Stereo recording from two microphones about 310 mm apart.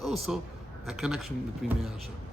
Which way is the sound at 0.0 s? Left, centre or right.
Centre.